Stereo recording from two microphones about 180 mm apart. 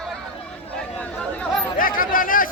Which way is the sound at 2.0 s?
50° left (ahead or behind).